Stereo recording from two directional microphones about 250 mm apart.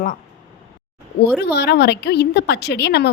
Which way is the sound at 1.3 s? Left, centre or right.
Left.